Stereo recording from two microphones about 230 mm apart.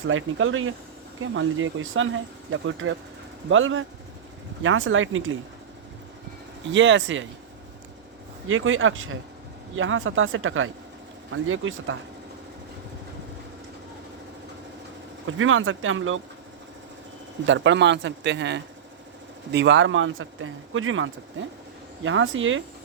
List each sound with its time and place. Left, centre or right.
0.1 s speech: right
6.7 s speech: right
8.4 s speech: right
15.3 s speech: right
17.4 s speech: right